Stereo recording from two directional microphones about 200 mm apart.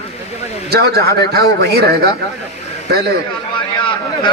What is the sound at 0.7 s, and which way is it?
Speech, 50° right (ahead or behind).